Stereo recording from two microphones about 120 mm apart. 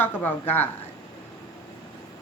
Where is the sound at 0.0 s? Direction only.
15° left (ahead or behind).